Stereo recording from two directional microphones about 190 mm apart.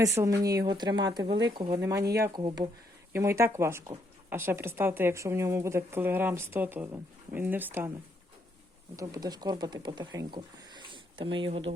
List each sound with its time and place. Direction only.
0.0 s speech: 15° right (ahead or behind)
9.0 s speech: 20° right (ahead or behind)